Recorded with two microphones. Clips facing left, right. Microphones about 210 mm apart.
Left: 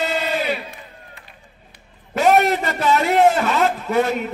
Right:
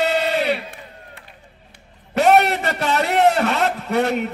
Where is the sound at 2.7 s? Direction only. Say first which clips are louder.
Left 2 dB; 70° right (ahead or behind).